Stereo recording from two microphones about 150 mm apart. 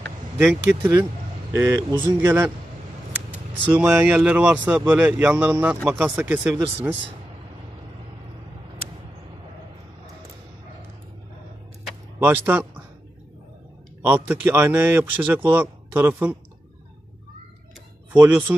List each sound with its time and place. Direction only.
0.4 s speech: 5° right (ahead or behind)
1.5 s speech: 20° right (ahead or behind)
3.6 s speech: 10° right (ahead or behind)
12.2 s speech: 10° right (ahead or behind)
14.0 s speech: 15° right (ahead or behind)
18.1 s speech: 15° right (ahead or behind)